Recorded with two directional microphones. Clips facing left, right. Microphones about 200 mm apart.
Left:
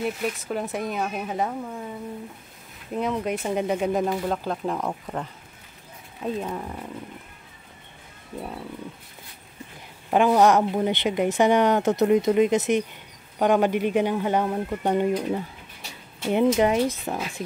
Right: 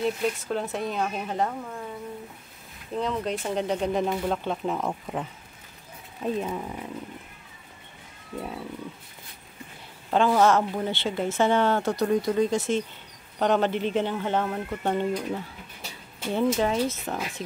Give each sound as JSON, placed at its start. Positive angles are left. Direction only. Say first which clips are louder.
{"t": 0.0, "sound": "speech", "louder": "right 1 dB", "side_deg": 10}
{"t": 2.9, "sound": "speech", "louder": "left 2 dB", "side_deg": 10}
{"t": 10.1, "sound": "speech", "louder": "left 3 dB", "side_deg": 15}